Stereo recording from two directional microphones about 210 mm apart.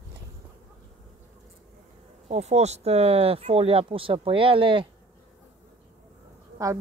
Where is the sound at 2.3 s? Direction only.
30° right (ahead or behind).